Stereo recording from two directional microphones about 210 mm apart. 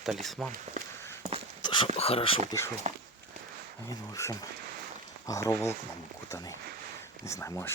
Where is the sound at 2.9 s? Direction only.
35° right (ahead or behind).